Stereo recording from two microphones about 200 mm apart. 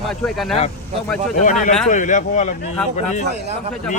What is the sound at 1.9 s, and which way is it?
Speech, 40° left (ahead or behind).